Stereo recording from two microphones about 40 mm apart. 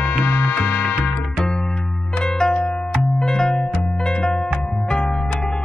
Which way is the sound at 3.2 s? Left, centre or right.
Centre.